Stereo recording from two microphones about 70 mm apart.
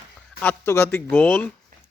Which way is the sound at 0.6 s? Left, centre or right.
Left.